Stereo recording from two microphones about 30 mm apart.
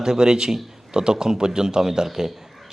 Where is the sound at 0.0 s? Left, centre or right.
Right.